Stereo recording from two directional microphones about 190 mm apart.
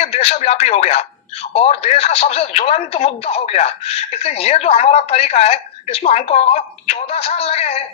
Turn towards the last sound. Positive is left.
turn(degrees=35)  # may be behind; listen again after turning